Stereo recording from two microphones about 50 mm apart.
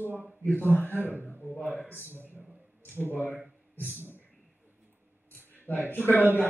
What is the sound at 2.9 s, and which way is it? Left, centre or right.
Speech, left.